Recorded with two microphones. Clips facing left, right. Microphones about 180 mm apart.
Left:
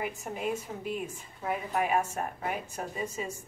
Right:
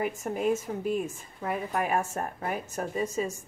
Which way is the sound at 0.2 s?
45° right (ahead or behind).